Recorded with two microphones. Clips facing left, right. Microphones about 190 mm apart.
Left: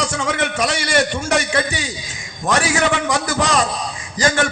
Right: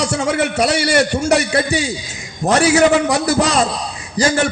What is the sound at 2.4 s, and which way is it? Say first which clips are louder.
A man's voice: right 6 dB; 35° right (ahead or behind).